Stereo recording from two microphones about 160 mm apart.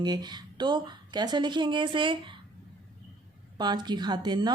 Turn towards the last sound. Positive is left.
turn(degrees=-25)  # may be behind; listen again after turning